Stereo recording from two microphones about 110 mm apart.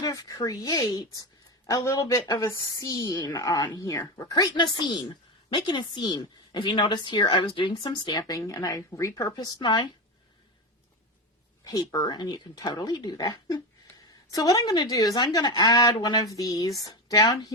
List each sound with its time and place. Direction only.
0.0 s a woman's voice: 35° left (ahead or behind)
9.3 s a woman's voice: 40° left (ahead or behind)
11.6 s a woman's voice: 35° left (ahead or behind)